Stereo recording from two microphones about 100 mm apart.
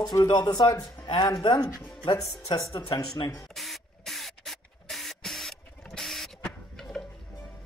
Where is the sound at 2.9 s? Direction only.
45° left (ahead or behind).